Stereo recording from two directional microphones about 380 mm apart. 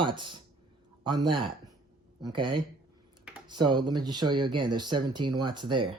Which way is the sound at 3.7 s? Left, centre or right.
Centre.